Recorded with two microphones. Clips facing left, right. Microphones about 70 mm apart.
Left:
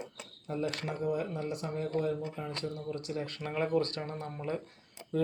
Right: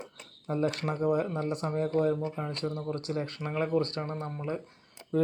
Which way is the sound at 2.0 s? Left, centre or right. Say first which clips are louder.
Right 5 dB; right.